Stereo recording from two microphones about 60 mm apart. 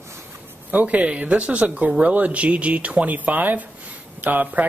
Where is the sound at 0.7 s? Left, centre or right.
Right.